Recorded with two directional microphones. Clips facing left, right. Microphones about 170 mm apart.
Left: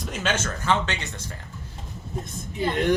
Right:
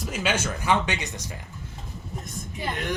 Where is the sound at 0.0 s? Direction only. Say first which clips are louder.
Even; 10° right (ahead or behind).